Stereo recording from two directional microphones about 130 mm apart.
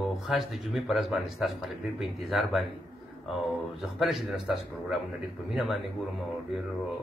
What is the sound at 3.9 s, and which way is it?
Speech, centre (ahead or behind).